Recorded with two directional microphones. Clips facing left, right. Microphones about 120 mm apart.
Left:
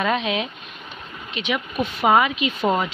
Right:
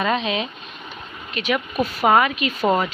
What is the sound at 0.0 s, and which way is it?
Speech, 5° left (ahead or behind).